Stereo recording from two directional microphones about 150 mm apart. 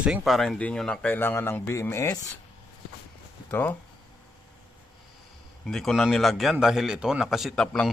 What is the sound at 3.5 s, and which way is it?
Speech, 10° left (ahead or behind).